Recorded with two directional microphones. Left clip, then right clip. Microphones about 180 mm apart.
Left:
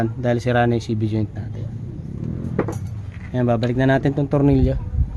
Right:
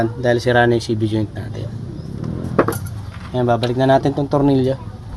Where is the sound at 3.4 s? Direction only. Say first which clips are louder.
Right 4 dB; 30° left (ahead or behind).